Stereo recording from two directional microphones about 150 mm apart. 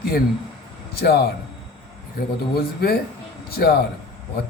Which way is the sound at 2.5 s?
90° left.